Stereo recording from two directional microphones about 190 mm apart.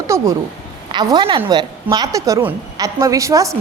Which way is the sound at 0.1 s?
15° right (ahead or behind).